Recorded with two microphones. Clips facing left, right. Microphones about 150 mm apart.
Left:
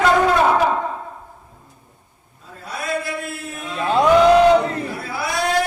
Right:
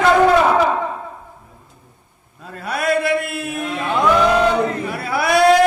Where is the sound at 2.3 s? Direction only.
75° right (ahead or behind).